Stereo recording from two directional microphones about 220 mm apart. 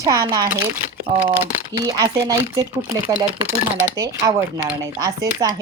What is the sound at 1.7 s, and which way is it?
A woman's voice, 15° right (ahead or behind).